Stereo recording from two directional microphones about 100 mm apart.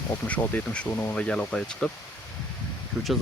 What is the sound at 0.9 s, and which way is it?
Speech, 25° left (ahead or behind).